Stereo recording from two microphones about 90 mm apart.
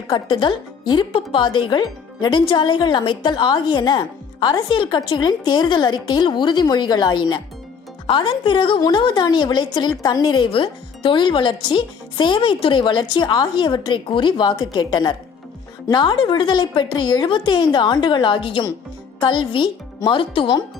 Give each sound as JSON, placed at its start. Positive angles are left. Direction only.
{"t": 0.1, "sound": "a woman's voice", "side_deg": 60}
{"t": 2.5, "sound": "a woman's voice", "side_deg": 60}
{"t": 12.8, "sound": "a woman's voice", "side_deg": 55}